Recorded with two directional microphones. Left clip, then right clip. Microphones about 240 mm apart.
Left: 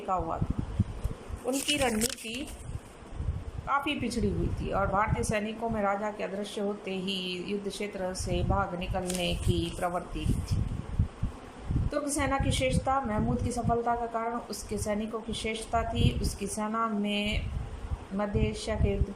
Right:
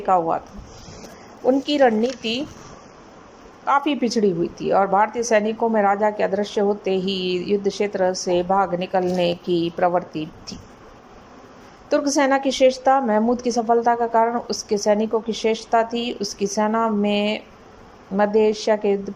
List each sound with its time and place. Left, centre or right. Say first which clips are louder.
0.1 s a woman's voice: right 12 dB; right
1.5 s a woman's voice: right 12 dB; right
3.7 s a woman's voice: right 10 dB; right
11.9 s a woman's voice: right 12 dB; right